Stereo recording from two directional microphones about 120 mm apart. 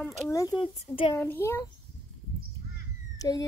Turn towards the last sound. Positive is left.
turn(degrees=30)  # may be behind; listen again after turning